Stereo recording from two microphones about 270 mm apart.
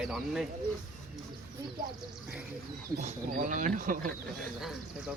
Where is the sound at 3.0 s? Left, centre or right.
Right.